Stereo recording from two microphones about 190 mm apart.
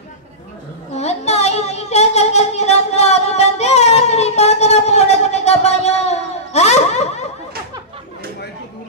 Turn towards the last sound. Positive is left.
turn(degrees=35)  # may be behind; listen again after turning